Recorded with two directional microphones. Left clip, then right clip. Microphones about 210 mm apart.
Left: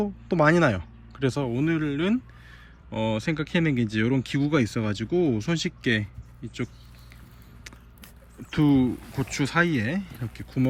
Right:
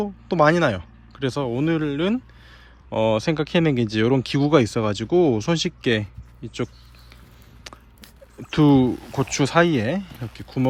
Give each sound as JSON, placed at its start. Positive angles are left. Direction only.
{"t": 0.0, "sound": "speech", "side_deg": -5}
{"t": 7.7, "sound": "a sound", "side_deg": -15}
{"t": 8.4, "sound": "speech", "side_deg": -20}